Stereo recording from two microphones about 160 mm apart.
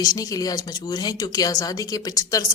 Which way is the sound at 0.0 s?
20° left (ahead or behind).